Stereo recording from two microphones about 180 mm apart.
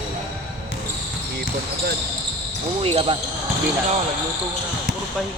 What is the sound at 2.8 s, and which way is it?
Speech, 30° right (ahead or behind).